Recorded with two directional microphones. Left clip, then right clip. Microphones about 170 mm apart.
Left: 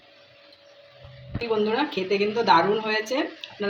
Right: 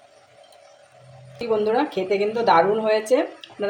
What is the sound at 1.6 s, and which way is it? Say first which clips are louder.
Speech: right 3 dB; 45° right (ahead or behind).